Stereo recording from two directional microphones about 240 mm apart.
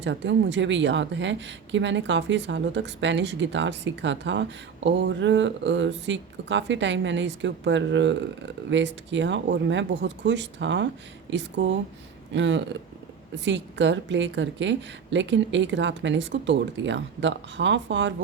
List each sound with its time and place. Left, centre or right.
0.0 s speech: right